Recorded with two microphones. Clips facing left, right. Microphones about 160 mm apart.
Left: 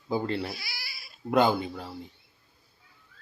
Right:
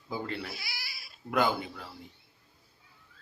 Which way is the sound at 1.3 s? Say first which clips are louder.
Left 5 dB; 25° left (ahead or behind).